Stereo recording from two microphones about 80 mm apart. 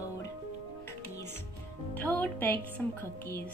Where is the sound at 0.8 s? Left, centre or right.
Left.